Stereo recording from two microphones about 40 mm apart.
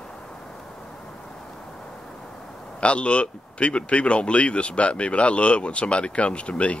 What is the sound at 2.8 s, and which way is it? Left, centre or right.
Speech, left.